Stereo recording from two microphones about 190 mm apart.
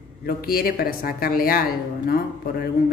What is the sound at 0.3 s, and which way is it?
Speech, 50° left (ahead or behind).